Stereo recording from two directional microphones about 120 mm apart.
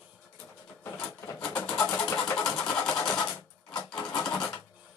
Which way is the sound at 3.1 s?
5° left (ahead or behind).